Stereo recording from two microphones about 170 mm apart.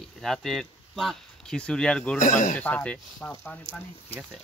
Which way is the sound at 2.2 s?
50° left (ahead or behind).